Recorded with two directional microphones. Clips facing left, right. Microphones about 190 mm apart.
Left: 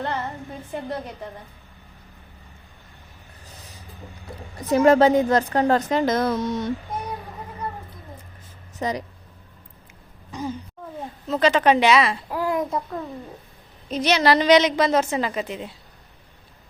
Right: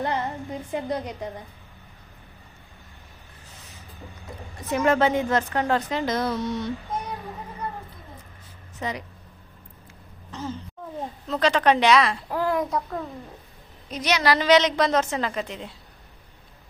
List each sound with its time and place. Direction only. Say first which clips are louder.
0.0 s a sound: right 1 dB; 15° right (ahead or behind)
0.7 s a woman's voice: right 2 dB; 15° right (ahead or behind)
4.7 s a woman's voice: left 6 dB; 35° left (ahead or behind)
8.8 s a woman's voice: left 5 dB; 35° left (ahead or behind)
10.3 s a woman's voice: left 3 dB; 15° left (ahead or behind)
11.3 s speech: left 3 dB; 5° left (ahead or behind)
13.9 s a woman's voice: left 4 dB; 30° left (ahead or behind)
14.8 s a woman's voice: left 2 dB; 5° left (ahead or behind)